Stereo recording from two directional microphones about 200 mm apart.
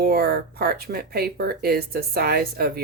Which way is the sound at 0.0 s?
50° right (ahead or behind).